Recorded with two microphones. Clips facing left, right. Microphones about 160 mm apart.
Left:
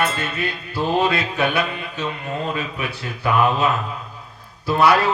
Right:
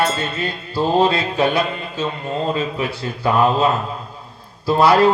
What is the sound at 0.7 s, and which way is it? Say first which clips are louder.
Speech: right 4 dB; 30° right (ahead or behind).